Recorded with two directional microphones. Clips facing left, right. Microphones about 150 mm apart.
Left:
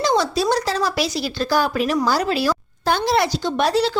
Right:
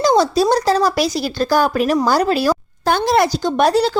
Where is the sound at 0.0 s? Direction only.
40° right (ahead or behind).